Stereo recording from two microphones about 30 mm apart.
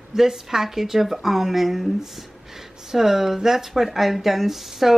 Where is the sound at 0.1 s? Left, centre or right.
Centre.